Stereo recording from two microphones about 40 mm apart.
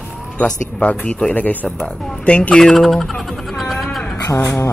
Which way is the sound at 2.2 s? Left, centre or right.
Left.